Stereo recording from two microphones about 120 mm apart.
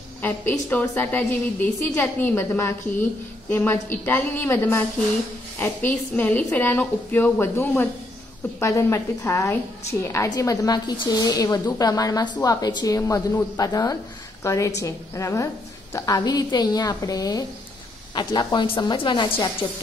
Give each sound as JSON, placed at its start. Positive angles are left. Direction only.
{"t": 0.2, "sound": "a woman's voice", "side_deg": 15}